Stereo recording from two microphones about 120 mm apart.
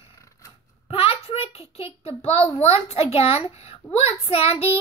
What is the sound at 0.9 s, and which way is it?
A child's voice, 50° left (ahead or behind).